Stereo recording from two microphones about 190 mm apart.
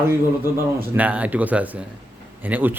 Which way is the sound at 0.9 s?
10° right (ahead or behind).